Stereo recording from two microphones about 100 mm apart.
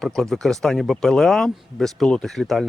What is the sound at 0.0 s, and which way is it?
Speech, 5° left (ahead or behind).